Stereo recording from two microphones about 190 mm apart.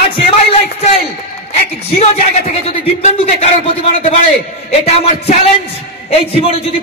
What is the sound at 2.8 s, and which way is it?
A man's voice, 35° left (ahead or behind).